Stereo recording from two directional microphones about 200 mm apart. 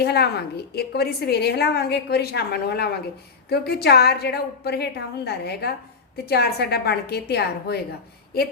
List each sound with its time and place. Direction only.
0.0 s a woman's voice: 55° left (ahead or behind)